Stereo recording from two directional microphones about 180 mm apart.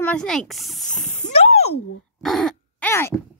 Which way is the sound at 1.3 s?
35° left (ahead or behind).